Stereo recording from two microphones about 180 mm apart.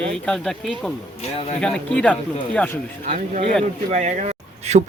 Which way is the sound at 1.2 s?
35° left (ahead or behind).